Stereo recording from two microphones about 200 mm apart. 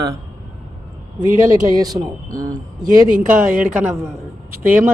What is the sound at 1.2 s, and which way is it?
A man's voice, 20° right (ahead or behind).